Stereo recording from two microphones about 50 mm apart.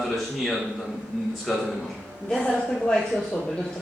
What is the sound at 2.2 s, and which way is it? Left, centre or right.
Speech, left.